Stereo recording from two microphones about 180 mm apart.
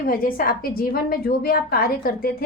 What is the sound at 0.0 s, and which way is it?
A woman's voice, 50° left (ahead or behind).